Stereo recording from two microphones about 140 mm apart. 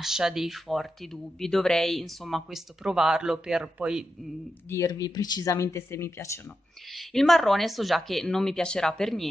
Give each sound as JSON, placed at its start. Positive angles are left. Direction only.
{"t": 0.0, "sound": "speech", "side_deg": -5}
{"t": 4.6, "sound": "speech", "side_deg": 20}
{"t": 7.0, "sound": "speech", "side_deg": 0}